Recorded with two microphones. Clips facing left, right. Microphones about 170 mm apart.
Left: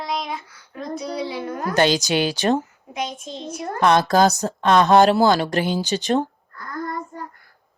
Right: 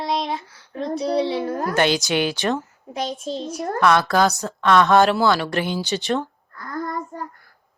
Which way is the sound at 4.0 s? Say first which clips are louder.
Left 2 dB; 40° left (ahead or behind).